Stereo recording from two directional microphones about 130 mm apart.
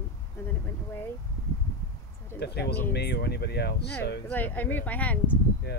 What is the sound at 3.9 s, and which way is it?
Speech, 15° left (ahead or behind).